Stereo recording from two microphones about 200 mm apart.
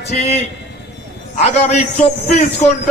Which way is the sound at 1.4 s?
35° left (ahead or behind).